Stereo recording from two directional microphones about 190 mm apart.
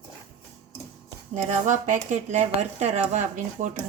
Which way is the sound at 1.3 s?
40° right (ahead or behind).